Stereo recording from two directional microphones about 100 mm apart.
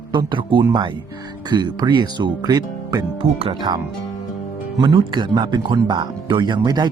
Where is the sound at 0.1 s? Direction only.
50° right (ahead or behind).